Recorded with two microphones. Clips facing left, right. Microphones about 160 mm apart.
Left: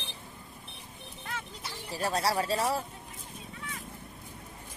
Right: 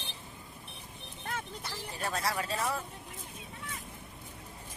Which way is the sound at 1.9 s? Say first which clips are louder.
Left 5 dB; 35° left (ahead or behind).